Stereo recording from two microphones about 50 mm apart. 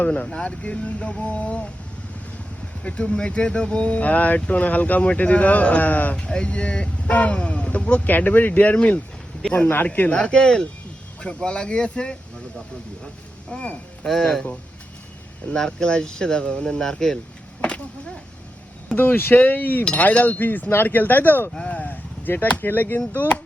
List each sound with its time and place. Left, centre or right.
0.3 s speech: centre
2.8 s speech: left
6.1 s speech: centre
8.0 s speech: left
10.1 s speech: centre
13.5 s speech: centre
14.1 s speech: centre
15.5 s speech: centre
17.6 s a sound: left
18.9 s speech: left
22.6 s speech: left